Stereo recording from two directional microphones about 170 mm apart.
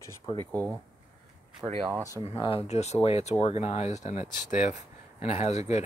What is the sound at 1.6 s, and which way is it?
Speech, 30° right (ahead or behind).